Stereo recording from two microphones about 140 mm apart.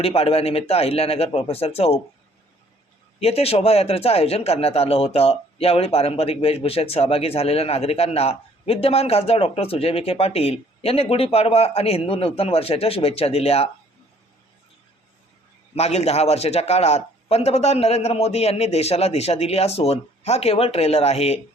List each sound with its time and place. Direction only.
0.0 s speech: 45° left (ahead or behind)
3.2 s speech: 45° left (ahead or behind)
15.7 s speech: 50° left (ahead or behind)